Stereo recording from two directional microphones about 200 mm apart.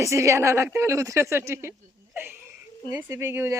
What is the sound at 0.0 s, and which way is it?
A woman's voice, 15° right (ahead or behind).